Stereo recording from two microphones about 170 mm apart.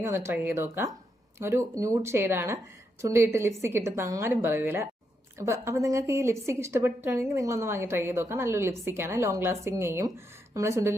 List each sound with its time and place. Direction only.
0.0 s a woman's voice: 15° right (ahead or behind)